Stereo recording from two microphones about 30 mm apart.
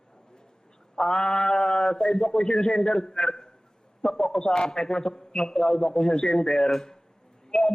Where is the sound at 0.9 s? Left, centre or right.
Centre.